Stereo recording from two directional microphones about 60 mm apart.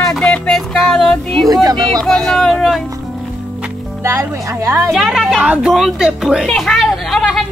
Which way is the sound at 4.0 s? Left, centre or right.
Right.